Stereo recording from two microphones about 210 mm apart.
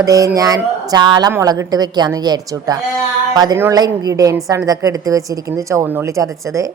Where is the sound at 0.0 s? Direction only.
15° right (ahead or behind).